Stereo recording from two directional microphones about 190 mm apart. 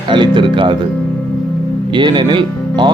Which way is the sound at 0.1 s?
25° right (ahead or behind).